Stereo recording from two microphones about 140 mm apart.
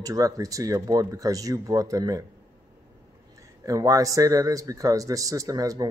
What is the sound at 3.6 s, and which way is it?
Speech, 25° right (ahead or behind).